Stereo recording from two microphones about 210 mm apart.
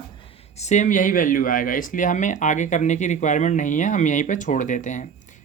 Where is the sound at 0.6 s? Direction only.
35° left (ahead or behind).